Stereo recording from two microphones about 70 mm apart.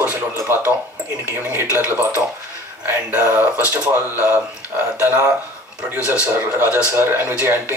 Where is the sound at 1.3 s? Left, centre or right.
Right.